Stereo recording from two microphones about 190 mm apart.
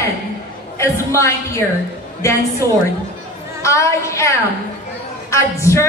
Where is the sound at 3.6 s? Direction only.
15° left (ahead or behind).